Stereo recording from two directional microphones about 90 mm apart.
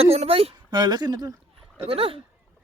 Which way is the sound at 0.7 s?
50° right (ahead or behind).